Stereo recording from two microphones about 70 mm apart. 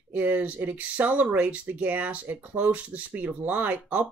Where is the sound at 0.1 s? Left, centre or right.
Right.